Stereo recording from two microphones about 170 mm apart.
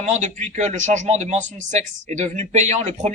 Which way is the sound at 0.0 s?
45° right (ahead or behind).